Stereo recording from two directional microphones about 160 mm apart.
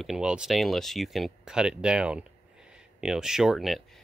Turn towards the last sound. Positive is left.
turn(degrees=0)  # may be behind; listen again after turning